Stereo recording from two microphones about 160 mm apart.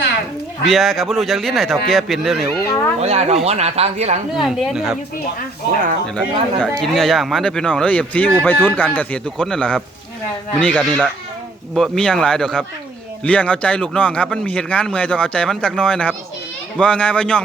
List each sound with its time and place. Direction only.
0.7 s speech: centre (ahead or behind)
2.6 s speech: 15° left (ahead or behind)
3.0 s speech: 40° right (ahead or behind)
4.4 s speech: centre (ahead or behind)
6.1 s speech: 5° left (ahead or behind)